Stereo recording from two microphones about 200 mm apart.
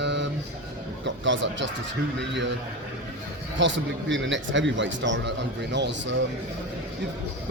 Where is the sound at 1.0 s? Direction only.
65° right (ahead or behind).